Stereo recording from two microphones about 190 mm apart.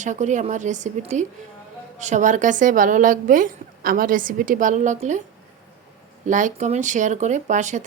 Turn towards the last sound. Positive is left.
turn(degrees=-40)  # may be behind; listen again after turning